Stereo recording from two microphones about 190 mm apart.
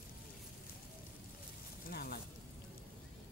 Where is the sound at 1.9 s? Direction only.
55° left (ahead or behind).